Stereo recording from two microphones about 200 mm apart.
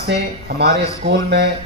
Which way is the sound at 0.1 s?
55° right (ahead or behind).